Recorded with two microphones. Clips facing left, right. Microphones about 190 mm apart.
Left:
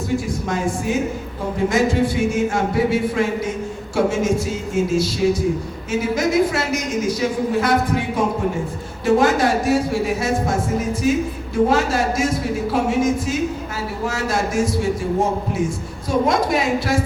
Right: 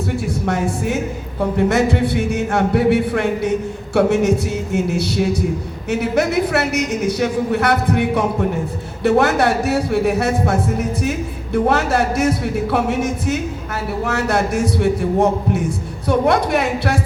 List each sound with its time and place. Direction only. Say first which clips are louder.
0.4 s a woman's voice: right 2 dB; 65° right (ahead or behind)